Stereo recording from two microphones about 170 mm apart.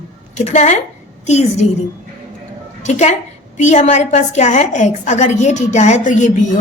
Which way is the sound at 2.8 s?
45° left (ahead or behind).